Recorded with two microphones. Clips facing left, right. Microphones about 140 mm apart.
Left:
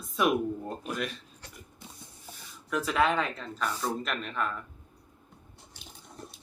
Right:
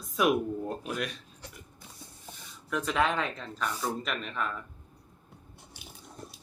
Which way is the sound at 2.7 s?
Centre (ahead or behind).